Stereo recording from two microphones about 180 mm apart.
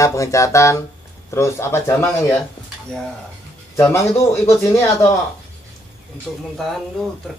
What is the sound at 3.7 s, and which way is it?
Speech, 15° left (ahead or behind).